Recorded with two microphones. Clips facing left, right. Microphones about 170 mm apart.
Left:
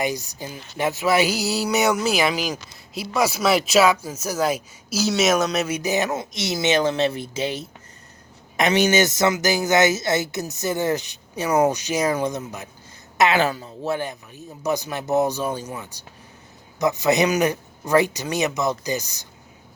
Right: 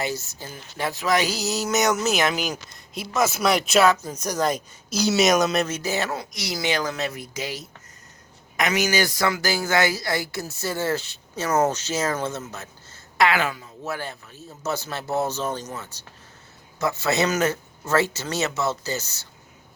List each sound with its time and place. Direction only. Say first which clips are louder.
0.0 s a man's voice: left 3 dB; 15° left (ahead or behind)
5.6 s a woman's voice: left 4 dB; 15° left (ahead or behind)
13.4 s speech: left 5 dB; 30° left (ahead or behind)
14.0 s a man's voice: left 4 dB; 15° left (ahead or behind)